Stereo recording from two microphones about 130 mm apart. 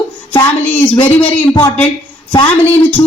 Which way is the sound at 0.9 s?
40° left (ahead or behind).